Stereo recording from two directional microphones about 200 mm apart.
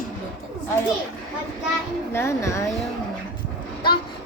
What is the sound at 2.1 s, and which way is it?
Speech, 10° left (ahead or behind).